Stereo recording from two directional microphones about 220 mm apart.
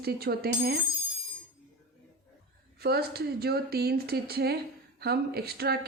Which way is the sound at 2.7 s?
45° right (ahead or behind).